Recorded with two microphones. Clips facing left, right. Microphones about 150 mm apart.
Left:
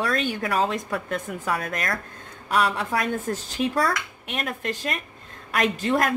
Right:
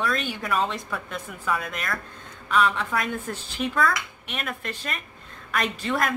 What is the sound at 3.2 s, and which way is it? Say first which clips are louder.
A woman's voice: left 4 dB; 40° left (ahead or behind).